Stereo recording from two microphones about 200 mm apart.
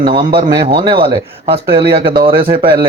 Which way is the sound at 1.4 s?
30° right (ahead or behind).